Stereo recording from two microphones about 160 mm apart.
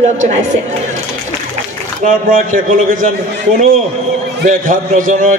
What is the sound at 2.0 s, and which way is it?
A man's voice, 55° right (ahead or behind).